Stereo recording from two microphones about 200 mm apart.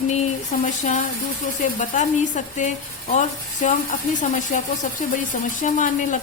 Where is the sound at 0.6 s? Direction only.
35° left (ahead or behind).